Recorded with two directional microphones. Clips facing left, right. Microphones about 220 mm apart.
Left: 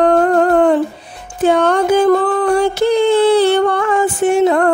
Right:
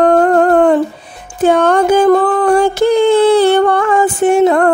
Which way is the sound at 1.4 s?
50° right (ahead or behind).